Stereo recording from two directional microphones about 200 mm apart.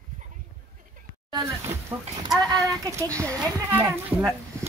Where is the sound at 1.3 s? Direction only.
15° right (ahead or behind).